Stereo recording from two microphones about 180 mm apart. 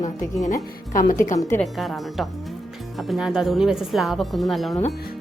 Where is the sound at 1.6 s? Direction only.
Centre (ahead or behind).